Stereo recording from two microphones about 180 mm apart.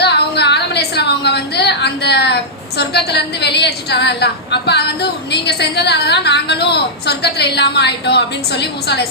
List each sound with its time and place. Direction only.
0.0 s a woman's voice: 70° left (ahead or behind)